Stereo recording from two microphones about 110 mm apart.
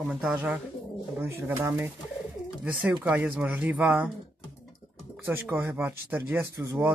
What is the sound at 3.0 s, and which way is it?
Speech, 15° right (ahead or behind).